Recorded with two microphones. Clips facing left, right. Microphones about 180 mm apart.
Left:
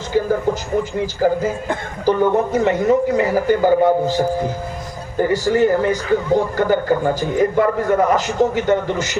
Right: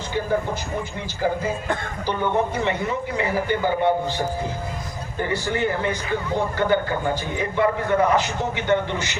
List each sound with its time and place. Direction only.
1.2 s a man's voice: 40° left (ahead or behind)